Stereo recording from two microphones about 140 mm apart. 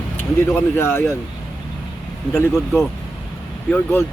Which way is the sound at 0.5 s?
15° left (ahead or behind).